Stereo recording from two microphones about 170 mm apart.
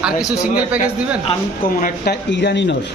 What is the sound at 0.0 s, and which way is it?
Speech, 5° right (ahead or behind).